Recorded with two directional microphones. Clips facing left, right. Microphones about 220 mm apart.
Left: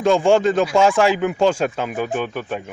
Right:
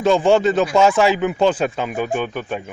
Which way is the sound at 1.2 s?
5° left (ahead or behind).